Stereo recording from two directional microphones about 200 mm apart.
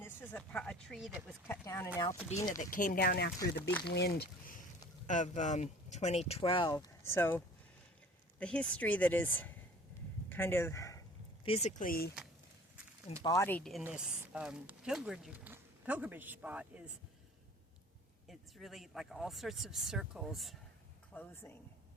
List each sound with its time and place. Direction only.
0.0 s speech: 10° left (ahead or behind)
1.5 s speech: 15° left (ahead or behind)
2.3 s speech: 40° left (ahead or behind)
3.4 s speech: 15° left (ahead or behind)
3.8 s speech: 55° left (ahead or behind)
5.0 s speech: 40° left (ahead or behind); by 11.0 s 15° left (ahead or behind)
11.4 s speech: 30° left (ahead or behind)
11.9 s speech: 50° left (ahead or behind)
13.2 s speech: 15° left (ahead or behind); by 16.9 s 5° right (ahead or behind)
18.3 s speech: centre (ahead or behind)